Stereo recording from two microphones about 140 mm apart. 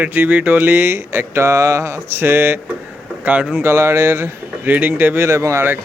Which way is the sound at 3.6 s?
20° right (ahead or behind).